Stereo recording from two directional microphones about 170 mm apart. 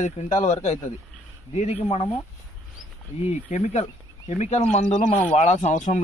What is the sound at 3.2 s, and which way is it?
Speech, 40° left (ahead or behind).